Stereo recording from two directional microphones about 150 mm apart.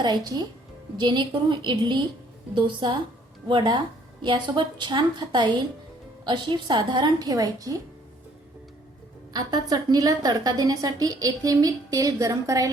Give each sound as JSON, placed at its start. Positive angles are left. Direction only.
{"t": 0.0, "sound": "a woman's voice", "side_deg": -30}
{"t": 9.3, "sound": "a woman's voice", "side_deg": -25}